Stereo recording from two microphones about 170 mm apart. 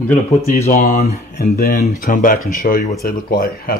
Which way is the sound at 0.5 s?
45° left (ahead or behind).